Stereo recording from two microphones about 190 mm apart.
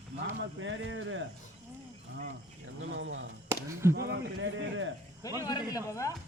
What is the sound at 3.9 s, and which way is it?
Speech, 60° right (ahead or behind).